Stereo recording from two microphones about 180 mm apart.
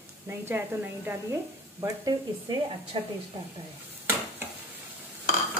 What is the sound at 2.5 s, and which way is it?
Speech, 25° right (ahead or behind).